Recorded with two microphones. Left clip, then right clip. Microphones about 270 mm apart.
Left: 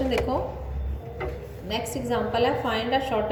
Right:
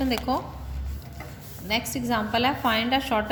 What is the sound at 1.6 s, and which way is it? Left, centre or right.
A woman's voice, right.